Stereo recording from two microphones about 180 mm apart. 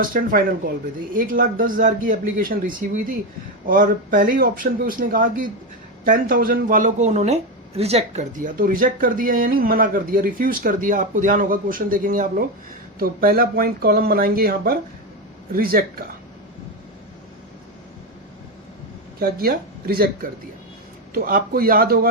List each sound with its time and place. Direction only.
0.0 s speech: 50° right (ahead or behind)
19.2 s speech: 55° right (ahead or behind)
21.1 s speech: 50° right (ahead or behind)